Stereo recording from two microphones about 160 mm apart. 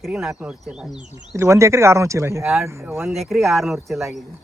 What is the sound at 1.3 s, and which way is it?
Speech, 20° right (ahead or behind).